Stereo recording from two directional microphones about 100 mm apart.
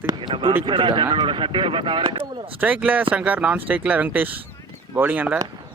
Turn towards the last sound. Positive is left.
turn(degrees=-15)  # may be behind; listen again after turning